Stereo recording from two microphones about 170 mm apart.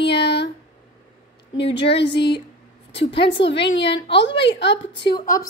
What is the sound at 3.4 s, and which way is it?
Female singing, 90° left.